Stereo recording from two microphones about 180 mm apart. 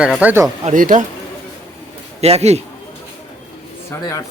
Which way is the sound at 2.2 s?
35° right (ahead or behind).